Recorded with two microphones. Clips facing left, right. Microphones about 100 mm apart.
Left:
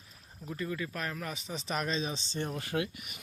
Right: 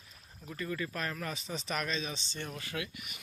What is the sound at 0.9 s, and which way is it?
Speech, 5° left (ahead or behind).